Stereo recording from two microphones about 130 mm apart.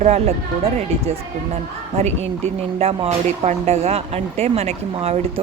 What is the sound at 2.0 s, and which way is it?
A woman's voice, 55° right (ahead or behind).